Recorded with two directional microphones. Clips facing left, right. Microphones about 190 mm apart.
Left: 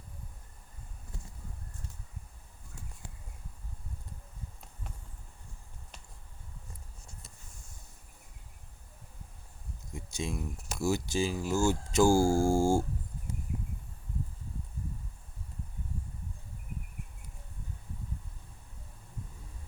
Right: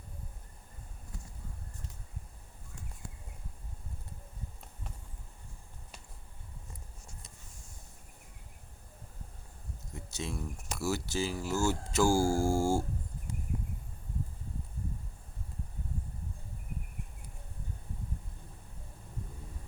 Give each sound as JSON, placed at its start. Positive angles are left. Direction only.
{"t": 9.9, "sound": "speech", "side_deg": 15}